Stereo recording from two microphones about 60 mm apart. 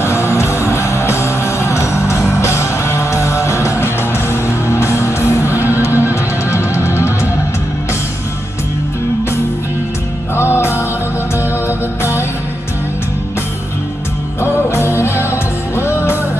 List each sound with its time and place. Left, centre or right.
0.0 s music: left
5.9 s music: right
6.5 s music: left
10.3 s music: left
14.4 s music: left